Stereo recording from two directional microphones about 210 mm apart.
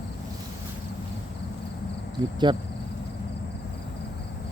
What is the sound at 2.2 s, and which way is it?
Speech, 20° right (ahead or behind).